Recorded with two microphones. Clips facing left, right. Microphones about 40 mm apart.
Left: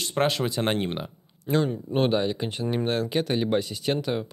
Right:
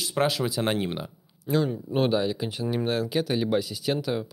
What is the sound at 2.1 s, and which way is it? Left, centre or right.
Speech, centre.